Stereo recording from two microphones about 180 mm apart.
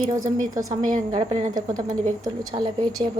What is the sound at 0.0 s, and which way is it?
Speech, 45° right (ahead or behind).